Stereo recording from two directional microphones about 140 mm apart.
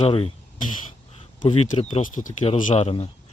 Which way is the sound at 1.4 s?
40° left (ahead or behind).